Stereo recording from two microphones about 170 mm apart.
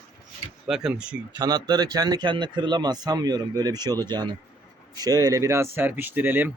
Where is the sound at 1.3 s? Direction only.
25° right (ahead or behind).